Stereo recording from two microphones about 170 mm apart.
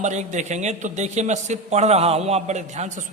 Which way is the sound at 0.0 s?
45° right (ahead or behind).